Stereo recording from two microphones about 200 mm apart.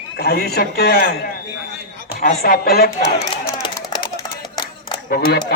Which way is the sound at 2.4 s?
50° left (ahead or behind).